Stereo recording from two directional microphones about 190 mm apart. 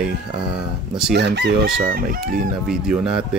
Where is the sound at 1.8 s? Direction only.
50° right (ahead or behind).